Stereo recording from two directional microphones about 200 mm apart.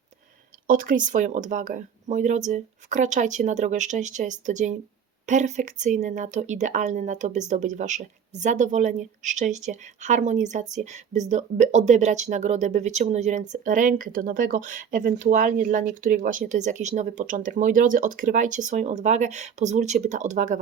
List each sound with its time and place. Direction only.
0.7 s speech: 45° right (ahead or behind)